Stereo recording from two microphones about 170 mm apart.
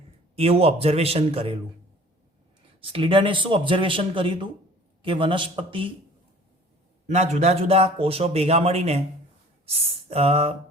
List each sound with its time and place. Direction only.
0.3 s a man's voice: 35° right (ahead or behind)
2.8 s a man's voice: 30° right (ahead or behind)
7.1 s a man's voice: 40° right (ahead or behind)